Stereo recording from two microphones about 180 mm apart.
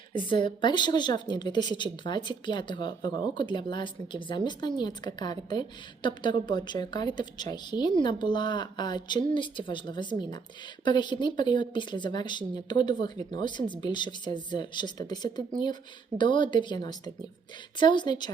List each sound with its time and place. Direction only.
0.1 s a woman's voice: 30° left (ahead or behind)